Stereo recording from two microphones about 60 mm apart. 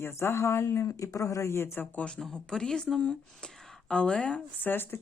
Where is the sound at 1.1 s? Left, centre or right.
Left.